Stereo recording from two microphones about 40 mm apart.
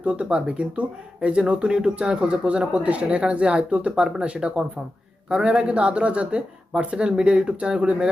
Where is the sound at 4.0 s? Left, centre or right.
Centre.